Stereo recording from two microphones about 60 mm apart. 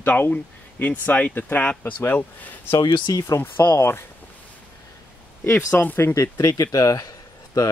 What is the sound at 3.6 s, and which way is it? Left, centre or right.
Speech, left.